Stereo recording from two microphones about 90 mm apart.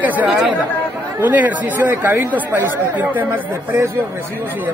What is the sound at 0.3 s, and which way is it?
Speech, centre (ahead or behind).